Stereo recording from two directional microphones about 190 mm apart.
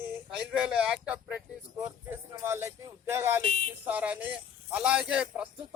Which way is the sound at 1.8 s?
10° right (ahead or behind).